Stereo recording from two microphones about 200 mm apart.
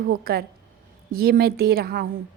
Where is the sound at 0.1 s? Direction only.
50° right (ahead or behind).